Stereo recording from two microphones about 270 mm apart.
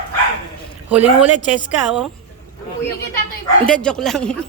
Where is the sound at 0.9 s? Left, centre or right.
Centre.